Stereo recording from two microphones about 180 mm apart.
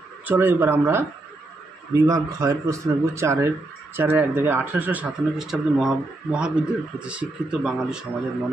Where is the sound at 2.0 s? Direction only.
15° right (ahead or behind).